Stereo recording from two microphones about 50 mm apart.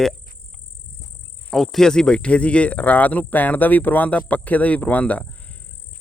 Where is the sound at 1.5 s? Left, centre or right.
Centre.